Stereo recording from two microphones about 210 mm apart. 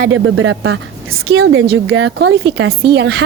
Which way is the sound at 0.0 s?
70° right (ahead or behind).